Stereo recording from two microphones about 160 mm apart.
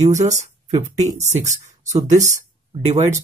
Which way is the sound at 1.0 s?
45° right (ahead or behind).